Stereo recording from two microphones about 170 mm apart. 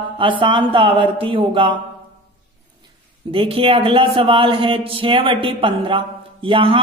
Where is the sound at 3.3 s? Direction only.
30° right (ahead or behind).